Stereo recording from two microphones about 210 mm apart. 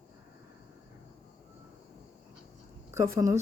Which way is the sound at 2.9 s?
15° right (ahead or behind).